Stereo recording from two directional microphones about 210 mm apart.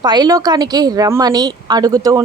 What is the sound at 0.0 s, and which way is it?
A woman's voice, 20° right (ahead or behind).